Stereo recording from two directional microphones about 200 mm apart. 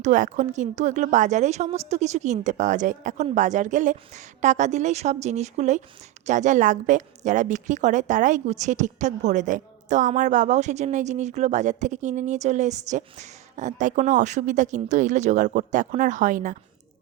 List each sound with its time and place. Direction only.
0.0 s a woman's voice: 40° right (ahead or behind)